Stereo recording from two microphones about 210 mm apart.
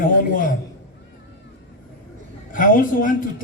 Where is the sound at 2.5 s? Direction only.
40° left (ahead or behind).